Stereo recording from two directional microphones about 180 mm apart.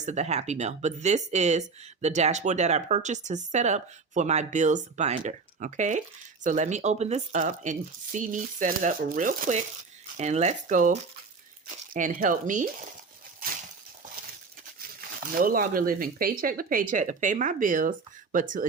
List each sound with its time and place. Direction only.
0.0 s speech: 40° right (ahead or behind)
15.2 s speech: 50° right (ahead or behind)